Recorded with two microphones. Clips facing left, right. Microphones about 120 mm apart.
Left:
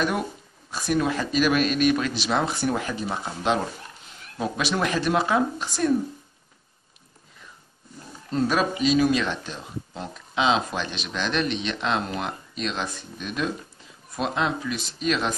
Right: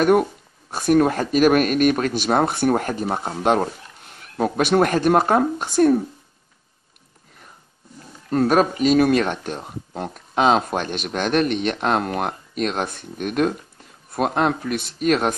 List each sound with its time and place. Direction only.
0.0 s speech: 50° right (ahead or behind)
8.3 s speech: 55° right (ahead or behind)